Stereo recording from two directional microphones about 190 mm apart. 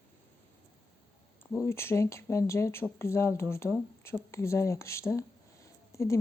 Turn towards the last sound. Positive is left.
turn(degrees=15)  # may be behind; listen again after turning